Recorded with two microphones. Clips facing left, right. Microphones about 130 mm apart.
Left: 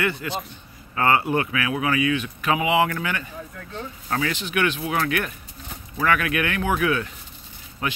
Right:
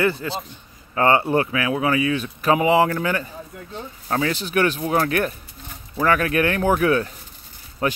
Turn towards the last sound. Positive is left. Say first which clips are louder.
# right 5 dB
turn(degrees=-35)  # may be behind; listen again after turning